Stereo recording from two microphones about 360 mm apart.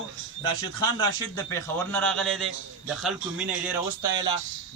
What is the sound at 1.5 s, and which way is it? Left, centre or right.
A man's voice, centre.